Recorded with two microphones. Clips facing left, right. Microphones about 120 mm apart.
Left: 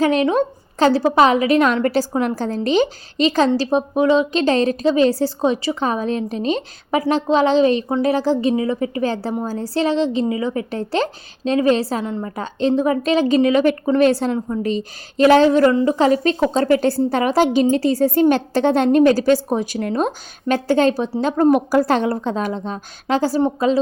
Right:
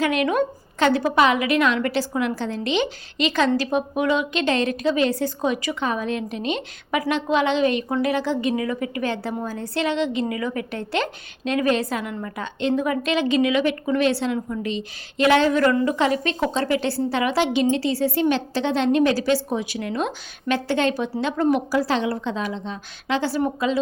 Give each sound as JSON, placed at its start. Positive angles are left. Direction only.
{"t": 0.0, "sound": "a woman's voice", "side_deg": 30}
{"t": 14.3, "sound": "a woman's voice", "side_deg": 35}